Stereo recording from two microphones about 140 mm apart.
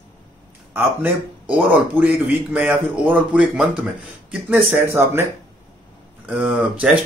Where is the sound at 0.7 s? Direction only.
15° right (ahead or behind).